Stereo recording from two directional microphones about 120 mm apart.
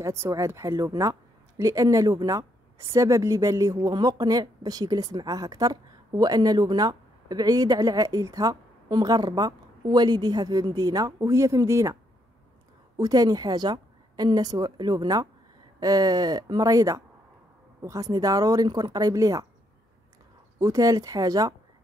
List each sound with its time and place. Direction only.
0.0 s a woman's voice: 25° right (ahead or behind)
20.5 s speech: 30° right (ahead or behind)